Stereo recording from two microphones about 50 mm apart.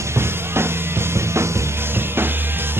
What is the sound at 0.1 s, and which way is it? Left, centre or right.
Music, right.